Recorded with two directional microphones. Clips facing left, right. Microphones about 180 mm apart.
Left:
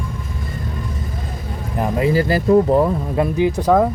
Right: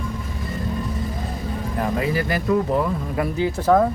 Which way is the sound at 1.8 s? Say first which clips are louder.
Left 6 dB; 25° left (ahead or behind).